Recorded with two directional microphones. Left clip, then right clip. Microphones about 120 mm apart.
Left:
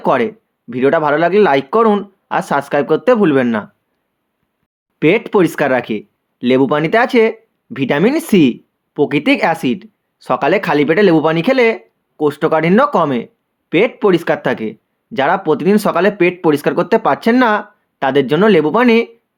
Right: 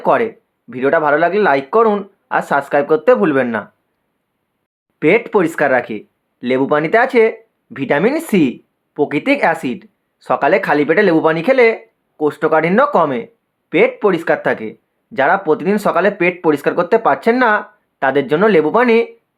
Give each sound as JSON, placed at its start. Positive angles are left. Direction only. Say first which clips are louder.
{"t": 0.0, "sound": "speech", "louder": "even", "side_deg": 25}
{"t": 4.9, "sound": "speech", "louder": "left 1 dB", "side_deg": 30}